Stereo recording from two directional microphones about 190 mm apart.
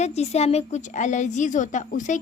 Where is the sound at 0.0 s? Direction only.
35° left (ahead or behind).